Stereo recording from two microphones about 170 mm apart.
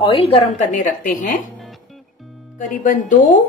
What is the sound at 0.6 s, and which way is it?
Speech, 50° left (ahead or behind).